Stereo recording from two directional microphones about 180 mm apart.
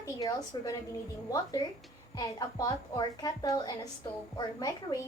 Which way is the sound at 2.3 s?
20° left (ahead or behind).